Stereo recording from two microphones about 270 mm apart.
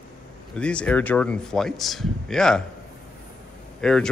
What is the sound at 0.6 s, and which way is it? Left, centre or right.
Speech, centre.